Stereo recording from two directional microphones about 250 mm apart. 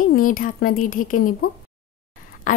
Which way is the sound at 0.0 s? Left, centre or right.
Left.